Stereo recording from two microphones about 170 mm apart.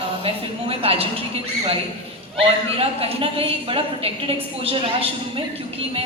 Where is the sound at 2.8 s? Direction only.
35° right (ahead or behind).